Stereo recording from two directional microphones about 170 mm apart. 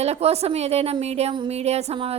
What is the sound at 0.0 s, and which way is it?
A woman's voice, 40° right (ahead or behind).